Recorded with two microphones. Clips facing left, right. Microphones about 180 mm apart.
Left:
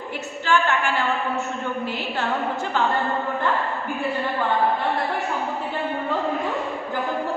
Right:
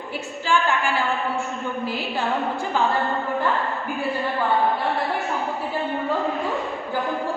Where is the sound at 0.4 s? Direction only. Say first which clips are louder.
Left 1 dB; 10° right (ahead or behind).